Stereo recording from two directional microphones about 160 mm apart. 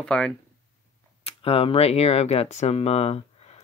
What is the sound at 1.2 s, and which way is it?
Speech, 35° left (ahead or behind).